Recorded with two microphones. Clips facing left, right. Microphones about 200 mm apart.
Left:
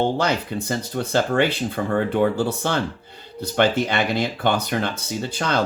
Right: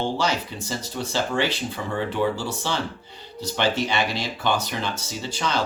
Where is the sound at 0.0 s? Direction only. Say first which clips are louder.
Left 4 dB; 55° left (ahead or behind).